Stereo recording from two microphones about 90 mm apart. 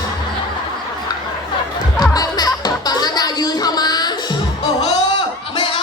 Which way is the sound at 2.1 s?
45° left (ahead or behind).